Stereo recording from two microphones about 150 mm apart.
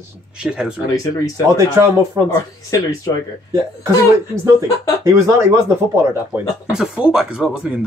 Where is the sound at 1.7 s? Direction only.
20° right (ahead or behind).